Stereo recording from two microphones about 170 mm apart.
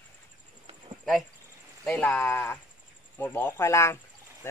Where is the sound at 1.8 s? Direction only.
10° left (ahead or behind).